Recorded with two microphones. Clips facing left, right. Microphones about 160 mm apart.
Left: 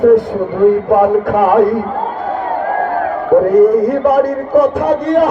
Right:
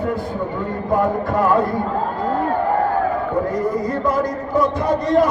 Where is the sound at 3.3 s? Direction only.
60° left (ahead or behind).